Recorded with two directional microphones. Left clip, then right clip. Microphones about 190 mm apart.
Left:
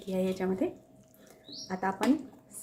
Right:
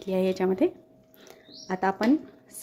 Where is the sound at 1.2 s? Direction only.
45° right (ahead or behind).